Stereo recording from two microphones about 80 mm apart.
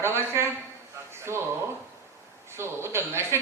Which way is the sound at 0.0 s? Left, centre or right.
Right.